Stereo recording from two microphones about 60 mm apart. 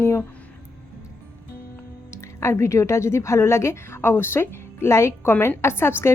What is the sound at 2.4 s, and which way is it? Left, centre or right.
A woman's voice, left.